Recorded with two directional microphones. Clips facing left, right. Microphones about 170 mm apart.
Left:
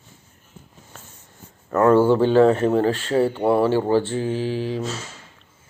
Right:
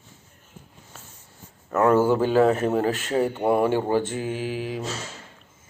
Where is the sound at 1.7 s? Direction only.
10° right (ahead or behind).